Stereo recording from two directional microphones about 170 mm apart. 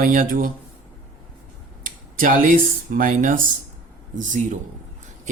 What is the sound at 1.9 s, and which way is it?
Speech, 50° right (ahead or behind).